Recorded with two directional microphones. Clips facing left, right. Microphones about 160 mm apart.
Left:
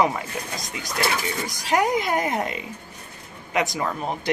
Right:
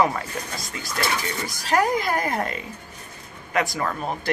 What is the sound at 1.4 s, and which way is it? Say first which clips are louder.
Speech: right 1 dB; 20° left (ahead or behind).